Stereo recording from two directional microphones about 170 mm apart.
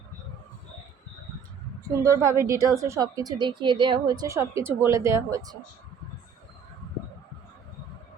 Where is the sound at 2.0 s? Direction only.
20° right (ahead or behind).